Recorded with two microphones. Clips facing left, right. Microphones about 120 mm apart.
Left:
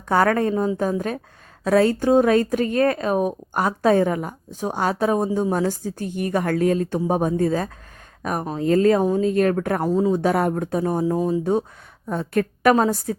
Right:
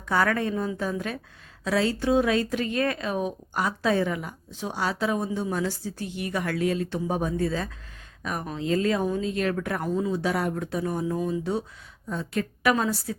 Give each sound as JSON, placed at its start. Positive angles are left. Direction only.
{"t": 0.1, "sound": "a woman's voice", "side_deg": 45}
{"t": 12.0, "sound": "speech", "side_deg": 55}